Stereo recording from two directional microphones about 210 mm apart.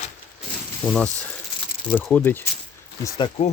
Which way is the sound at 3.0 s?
20° left (ahead or behind).